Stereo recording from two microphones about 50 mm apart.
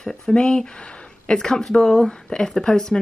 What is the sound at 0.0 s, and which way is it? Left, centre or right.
Speech, centre.